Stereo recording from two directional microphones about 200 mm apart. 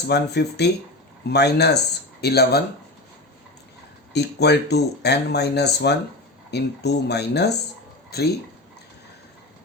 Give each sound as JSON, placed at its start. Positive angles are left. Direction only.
{"t": 0.1, "sound": "speech", "side_deg": 55}
{"t": 4.1, "sound": "speech", "side_deg": 55}